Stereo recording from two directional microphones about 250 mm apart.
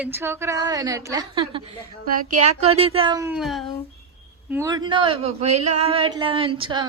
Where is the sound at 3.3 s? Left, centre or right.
Centre.